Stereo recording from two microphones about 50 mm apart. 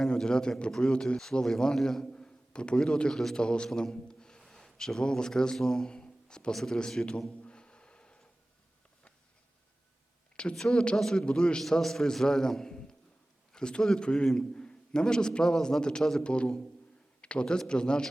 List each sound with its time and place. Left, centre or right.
0.0 s a man's voice: centre
7.3 s a sound: left
10.5 s a man's voice: centre